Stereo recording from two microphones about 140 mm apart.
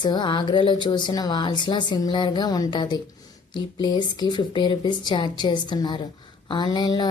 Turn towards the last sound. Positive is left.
turn(degrees=30)  # may be behind; listen again after turning